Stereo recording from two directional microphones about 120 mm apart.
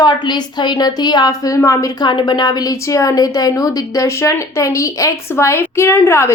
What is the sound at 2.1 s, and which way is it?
A woman's voice, 40° left (ahead or behind).